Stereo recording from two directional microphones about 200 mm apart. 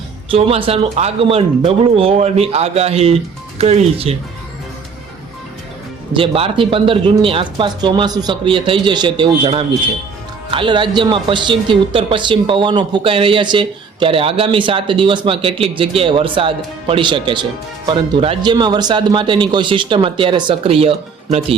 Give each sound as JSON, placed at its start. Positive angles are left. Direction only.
{"t": 0.3, "sound": "speech", "side_deg": -25}
{"t": 6.1, "sound": "a woman's voice", "side_deg": -25}